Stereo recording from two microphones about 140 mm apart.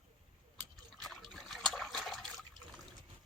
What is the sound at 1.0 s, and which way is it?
Liquid, centre (ahead or behind).